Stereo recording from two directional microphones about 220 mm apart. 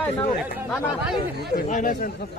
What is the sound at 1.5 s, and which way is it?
Speech, 35° left (ahead or behind).